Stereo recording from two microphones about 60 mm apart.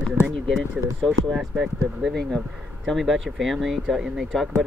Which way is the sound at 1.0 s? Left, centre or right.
Centre.